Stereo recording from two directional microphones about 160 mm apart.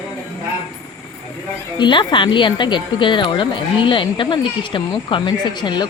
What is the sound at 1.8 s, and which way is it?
Speech, 30° left (ahead or behind).